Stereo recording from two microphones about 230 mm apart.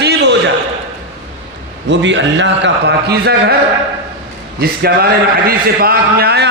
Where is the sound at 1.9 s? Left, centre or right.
Right.